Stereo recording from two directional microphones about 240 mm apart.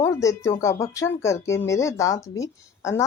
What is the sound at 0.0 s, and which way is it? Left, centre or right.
Speech, centre.